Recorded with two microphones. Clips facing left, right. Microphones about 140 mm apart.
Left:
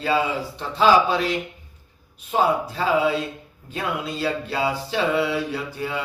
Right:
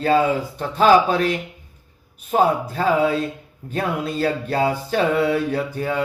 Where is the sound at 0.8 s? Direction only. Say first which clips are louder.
Right 3 dB; 50° right (ahead or behind).